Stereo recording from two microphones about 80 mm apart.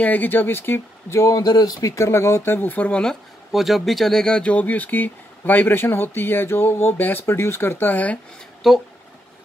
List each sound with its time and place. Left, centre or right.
0.0 s speech: left
1.5 s speech: left
3.5 s speech: centre; by 8.2 s left
8.6 s speech: centre